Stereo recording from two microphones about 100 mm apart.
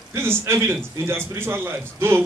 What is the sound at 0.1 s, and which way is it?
A man's voice, 25° right (ahead or behind).